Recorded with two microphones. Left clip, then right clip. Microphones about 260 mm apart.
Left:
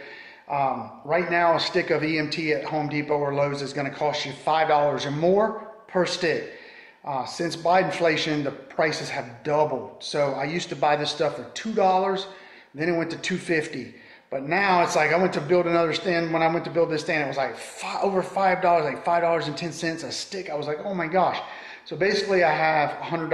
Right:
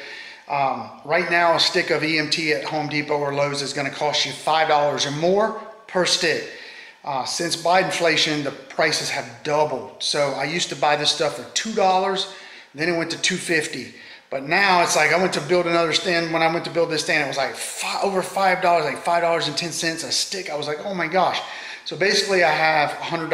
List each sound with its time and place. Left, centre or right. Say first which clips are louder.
0.5 s a man's voice: right 3 dB; centre